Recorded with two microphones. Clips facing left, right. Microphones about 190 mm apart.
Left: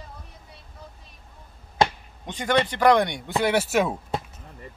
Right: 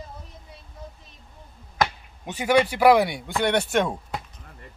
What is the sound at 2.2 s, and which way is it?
Speech, 10° right (ahead or behind).